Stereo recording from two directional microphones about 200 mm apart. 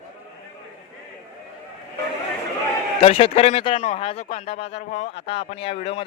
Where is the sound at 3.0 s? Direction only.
30° left (ahead or behind).